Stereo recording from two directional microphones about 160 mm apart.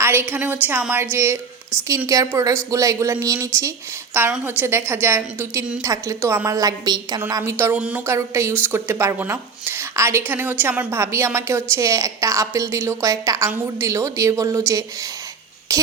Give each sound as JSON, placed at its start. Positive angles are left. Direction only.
{"t": 0.0, "sound": "speech", "side_deg": -15}
{"t": 7.6, "sound": "speech", "side_deg": -10}
{"t": 15.7, "sound": "music", "side_deg": -20}